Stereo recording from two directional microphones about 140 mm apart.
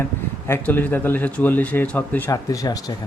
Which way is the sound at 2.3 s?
25° left (ahead or behind).